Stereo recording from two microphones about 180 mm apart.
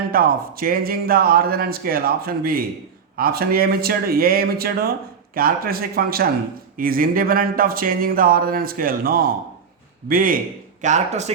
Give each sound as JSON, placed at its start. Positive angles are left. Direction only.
{"t": 0.1, "sound": "speech", "side_deg": -55}
{"t": 10.8, "sound": "speech", "side_deg": -40}